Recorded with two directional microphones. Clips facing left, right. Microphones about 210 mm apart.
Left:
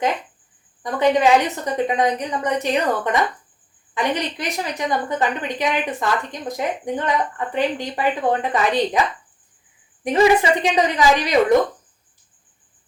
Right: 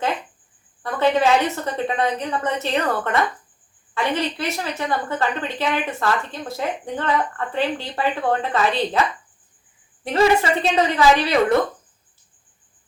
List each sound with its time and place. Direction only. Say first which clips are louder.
0.8 s a woman's voice: left 1 dB; 15° left (ahead or behind)
10.0 s a woman's voice: left 2 dB; 15° left (ahead or behind)